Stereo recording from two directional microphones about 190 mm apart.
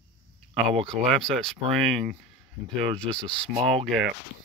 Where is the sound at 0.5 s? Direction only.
30° right (ahead or behind).